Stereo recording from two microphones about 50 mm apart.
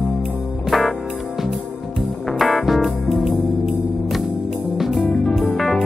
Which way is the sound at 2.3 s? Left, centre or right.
Centre.